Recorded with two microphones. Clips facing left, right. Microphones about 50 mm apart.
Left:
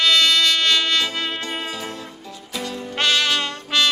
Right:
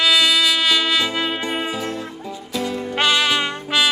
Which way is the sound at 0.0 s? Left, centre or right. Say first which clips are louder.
Right 1 dB; centre.